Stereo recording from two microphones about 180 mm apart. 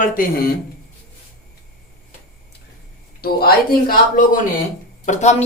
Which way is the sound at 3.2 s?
55° left (ahead or behind).